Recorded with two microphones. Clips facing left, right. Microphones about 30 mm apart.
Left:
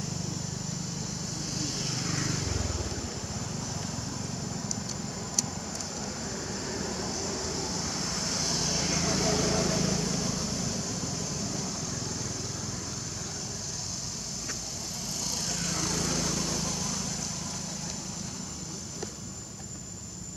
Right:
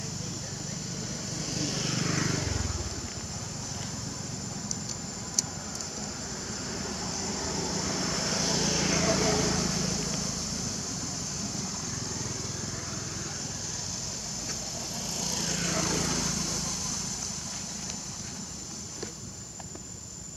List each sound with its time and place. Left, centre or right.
1.7 s vehicle: right
2.3 s vehicle: centre
6.8 s vehicle: centre
15.1 s lawn mower: centre